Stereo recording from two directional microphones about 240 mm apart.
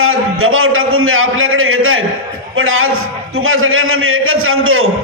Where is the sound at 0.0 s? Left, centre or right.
Right.